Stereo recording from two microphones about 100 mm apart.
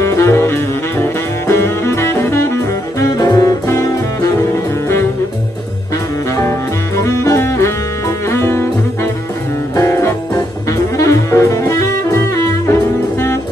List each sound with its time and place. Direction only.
0.0 s saxophone: 25° left (ahead or behind)
3.2 s saxophone: 40° left (ahead or behind)
7.0 s music: 30° left (ahead or behind)
9.8 s music: 25° left (ahead or behind)
11.0 s saxophone: 30° left (ahead or behind)